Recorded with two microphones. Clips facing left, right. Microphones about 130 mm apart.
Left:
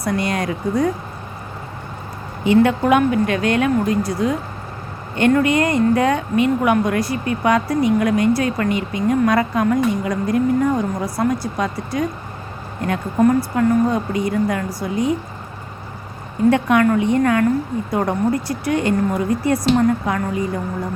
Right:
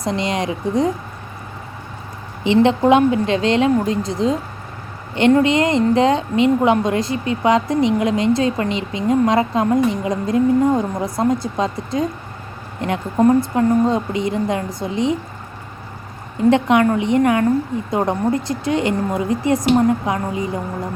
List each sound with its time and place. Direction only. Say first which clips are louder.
0.0 s a woman's voice: even; 20° right (ahead or behind)
2.4 s a woman's voice: right 1 dB; 20° right (ahead or behind)
16.5 s a woman's voice: right 1 dB; 20° right (ahead or behind)